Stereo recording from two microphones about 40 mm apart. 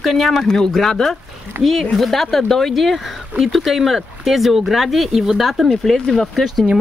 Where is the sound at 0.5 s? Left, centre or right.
Centre.